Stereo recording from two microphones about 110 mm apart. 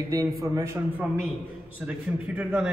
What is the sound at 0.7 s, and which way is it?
A man's voice, 15° right (ahead or behind).